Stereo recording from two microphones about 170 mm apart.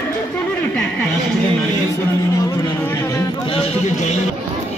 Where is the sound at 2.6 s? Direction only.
15° left (ahead or behind).